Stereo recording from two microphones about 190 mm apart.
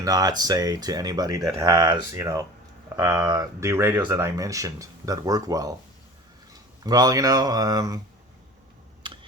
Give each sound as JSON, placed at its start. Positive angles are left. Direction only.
{"t": 0.0, "sound": "speech", "side_deg": -20}
{"t": 9.0, "sound": "computer keyboard", "side_deg": -25}